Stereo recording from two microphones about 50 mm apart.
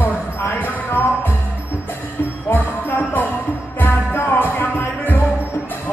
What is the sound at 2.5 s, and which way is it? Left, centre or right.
Jingle bell, left.